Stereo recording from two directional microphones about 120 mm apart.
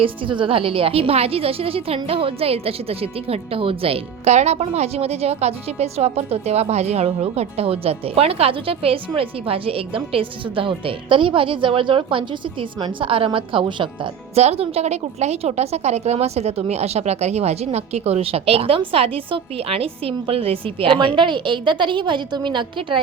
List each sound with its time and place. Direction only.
0.0 s a woman's voice: 45° right (ahead or behind)
14.3 s a woman's voice: 60° right (ahead or behind); by 23.0 s 40° right (ahead or behind)